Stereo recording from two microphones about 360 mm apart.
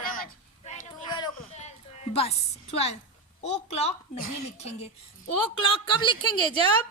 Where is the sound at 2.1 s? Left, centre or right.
Centre.